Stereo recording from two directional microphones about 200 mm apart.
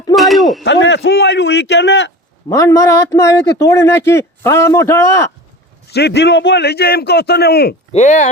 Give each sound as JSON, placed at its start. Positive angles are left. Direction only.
{"t": 0.2, "sound": "a sound", "side_deg": 0}
{"t": 0.6, "sound": "speech", "side_deg": 60}
{"t": 2.5, "sound": "a man's voice", "side_deg": 15}
{"t": 5.9, "sound": "a man's voice", "side_deg": 55}
{"t": 7.9, "sound": "speech", "side_deg": 35}